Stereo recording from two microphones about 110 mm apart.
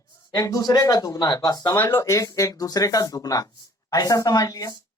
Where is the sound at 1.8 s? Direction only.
25° left (ahead or behind).